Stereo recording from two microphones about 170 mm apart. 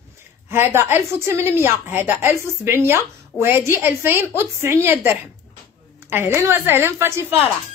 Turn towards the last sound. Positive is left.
turn(degrees=-15)  # may be behind; listen again after turning